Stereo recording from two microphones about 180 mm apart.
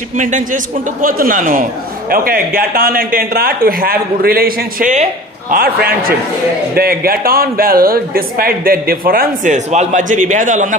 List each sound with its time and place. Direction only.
0.2 s a man's voice: 45° right (ahead or behind)